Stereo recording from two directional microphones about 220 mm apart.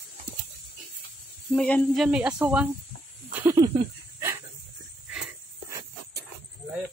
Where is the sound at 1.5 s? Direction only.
5° left (ahead or behind).